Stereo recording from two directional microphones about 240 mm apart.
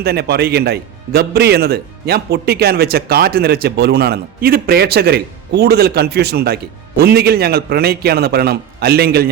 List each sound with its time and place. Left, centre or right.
0.0 s a man's voice: right